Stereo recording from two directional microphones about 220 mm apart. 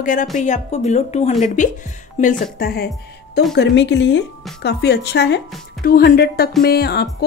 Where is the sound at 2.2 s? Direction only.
45° left (ahead or behind).